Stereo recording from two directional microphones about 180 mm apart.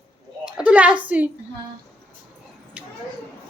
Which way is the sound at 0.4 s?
5° right (ahead or behind).